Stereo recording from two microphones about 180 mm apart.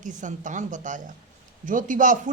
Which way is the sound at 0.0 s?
45° right (ahead or behind).